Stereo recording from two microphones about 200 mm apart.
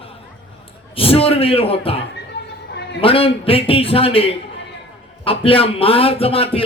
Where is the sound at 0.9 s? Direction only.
30° left (ahead or behind).